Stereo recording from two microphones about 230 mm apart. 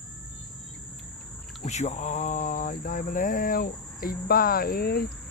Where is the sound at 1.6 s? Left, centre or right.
Left.